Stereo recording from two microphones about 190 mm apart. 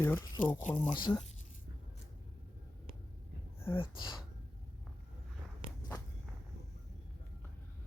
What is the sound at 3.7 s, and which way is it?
Speech, 25° left (ahead or behind).